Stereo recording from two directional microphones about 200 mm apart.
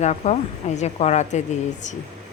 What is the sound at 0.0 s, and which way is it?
A woman's voice, 35° left (ahead or behind).